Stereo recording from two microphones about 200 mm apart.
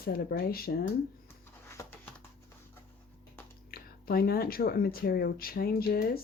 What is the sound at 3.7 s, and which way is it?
Speech, 50° left (ahead or behind).